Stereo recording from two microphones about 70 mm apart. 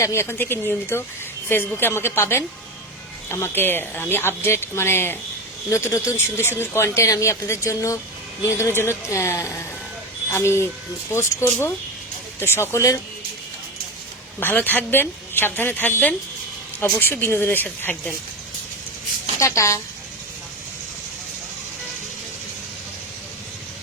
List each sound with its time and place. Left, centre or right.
0.0 s speech: left
5.6 s speech: left
14.3 s a woman's voice: left
19.4 s speech: left